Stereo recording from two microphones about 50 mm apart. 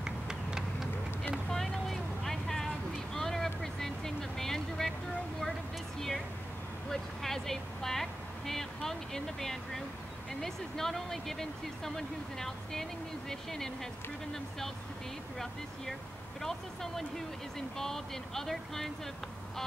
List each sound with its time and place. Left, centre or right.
0.0 s a sound: centre
1.5 s vehicle: centre
5.9 s vehicle: centre
10.4 s speech: centre
15.3 s speech: centre